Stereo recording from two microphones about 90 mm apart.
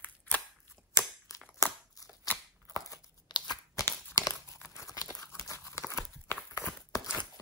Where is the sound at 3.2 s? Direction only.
50° left (ahead or behind).